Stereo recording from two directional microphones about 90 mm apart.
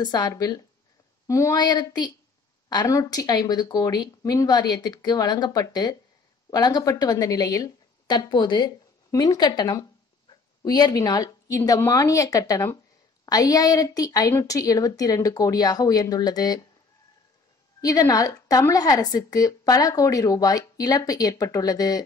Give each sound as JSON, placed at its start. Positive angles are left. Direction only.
{"t": 0.0, "sound": "speech", "side_deg": 50}
{"t": 8.1, "sound": "a woman's voice", "side_deg": 55}
{"t": 17.8, "sound": "a woman's voice", "side_deg": 40}